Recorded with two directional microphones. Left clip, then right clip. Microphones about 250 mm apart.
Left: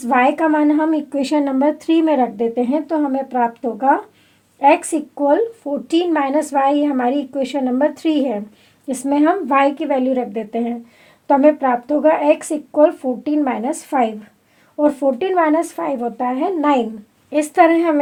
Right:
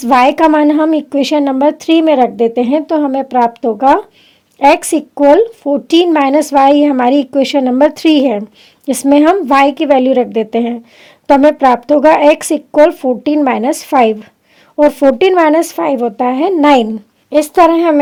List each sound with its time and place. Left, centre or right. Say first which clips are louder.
0.0 s speech: right 7 dB; right